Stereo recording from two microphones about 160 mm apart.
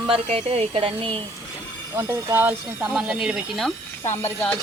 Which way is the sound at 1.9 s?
15° right (ahead or behind).